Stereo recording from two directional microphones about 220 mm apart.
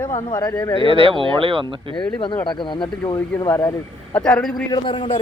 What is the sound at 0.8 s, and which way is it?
Speech, 25° right (ahead or behind).